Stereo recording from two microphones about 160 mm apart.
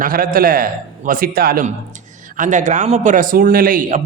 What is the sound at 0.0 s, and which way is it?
A man's voice, 60° right (ahead or behind).